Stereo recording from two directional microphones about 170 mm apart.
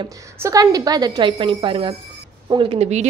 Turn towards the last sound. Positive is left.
turn(degrees=-40)  # may be behind; listen again after turning